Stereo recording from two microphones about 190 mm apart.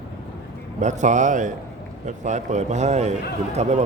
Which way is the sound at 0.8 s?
40° right (ahead or behind).